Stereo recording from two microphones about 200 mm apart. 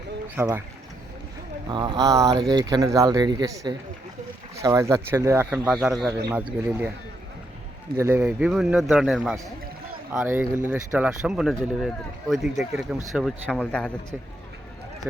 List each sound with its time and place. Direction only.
0.3 s speech: 10° right (ahead or behind)
1.7 s speech: 25° right (ahead or behind)
5.7 s speech: centre (ahead or behind)
6.1 s speech: 15° right (ahead or behind)
7.9 s speech: 15° right (ahead or behind)
8.2 s speech: 5° right (ahead or behind)